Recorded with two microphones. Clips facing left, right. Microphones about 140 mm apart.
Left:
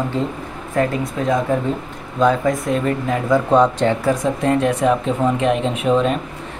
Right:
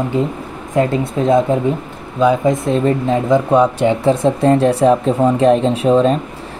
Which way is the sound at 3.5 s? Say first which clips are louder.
Even; 10° right (ahead or behind).